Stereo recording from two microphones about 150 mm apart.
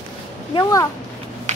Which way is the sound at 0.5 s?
20° left (ahead or behind).